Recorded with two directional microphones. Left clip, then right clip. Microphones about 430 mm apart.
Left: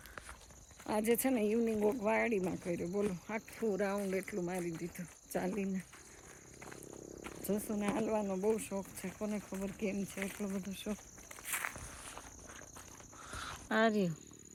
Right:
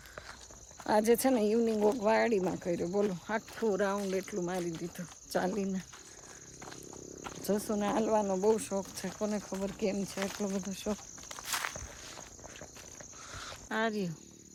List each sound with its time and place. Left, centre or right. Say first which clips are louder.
0.9 s speech: right 7 dB; centre
7.3 s speech: right 6 dB; centre
13.3 s cricket: left 1 dB; centre